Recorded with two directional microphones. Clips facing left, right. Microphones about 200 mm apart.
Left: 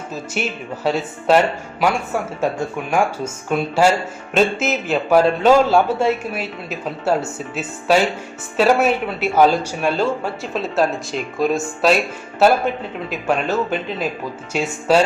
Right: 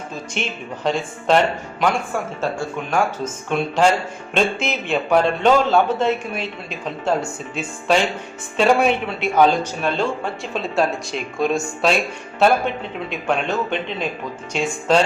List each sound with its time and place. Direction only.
0.1 s a man's voice: 5° left (ahead or behind)